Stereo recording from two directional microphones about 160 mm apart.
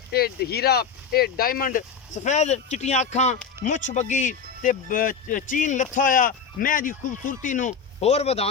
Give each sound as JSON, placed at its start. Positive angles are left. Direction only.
{"t": 0.1, "sound": "speech", "side_deg": 80}